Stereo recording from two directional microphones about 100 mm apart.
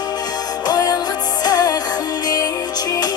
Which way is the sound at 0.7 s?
40° left (ahead or behind).